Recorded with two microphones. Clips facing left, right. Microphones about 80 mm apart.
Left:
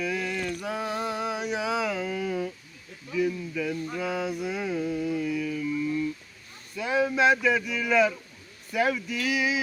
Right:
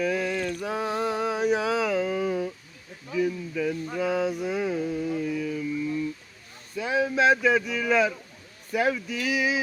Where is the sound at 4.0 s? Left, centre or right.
Right.